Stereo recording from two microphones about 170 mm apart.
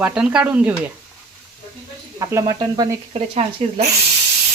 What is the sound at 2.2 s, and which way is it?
Speech, 20° right (ahead or behind).